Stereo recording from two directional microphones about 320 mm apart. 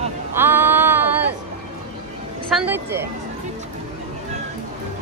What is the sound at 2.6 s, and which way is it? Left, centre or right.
Speech, centre.